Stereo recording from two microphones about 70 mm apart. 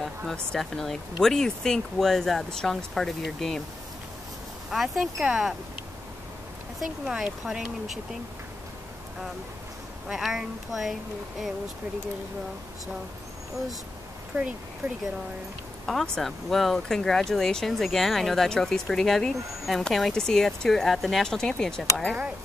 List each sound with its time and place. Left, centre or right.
0.0 s speech: centre
4.6 s speech: centre
6.8 s speech: centre
10.0 s speech: centre
14.3 s speech: centre
14.8 s speech: right
15.9 s speech: centre